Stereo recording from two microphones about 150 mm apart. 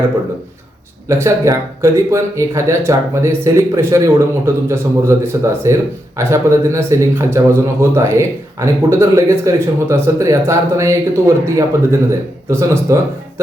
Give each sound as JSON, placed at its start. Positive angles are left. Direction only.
{"t": 1.0, "sound": "speech", "side_deg": -20}